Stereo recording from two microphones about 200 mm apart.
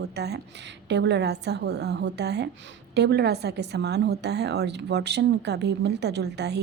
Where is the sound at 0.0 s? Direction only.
55° right (ahead or behind).